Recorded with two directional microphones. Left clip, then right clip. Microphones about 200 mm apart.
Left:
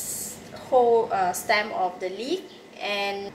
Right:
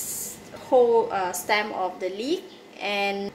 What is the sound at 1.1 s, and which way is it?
A woman's voice, 40° right (ahead or behind).